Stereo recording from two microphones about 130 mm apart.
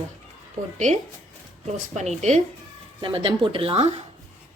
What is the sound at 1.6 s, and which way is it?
Speech, 60° right (ahead or behind).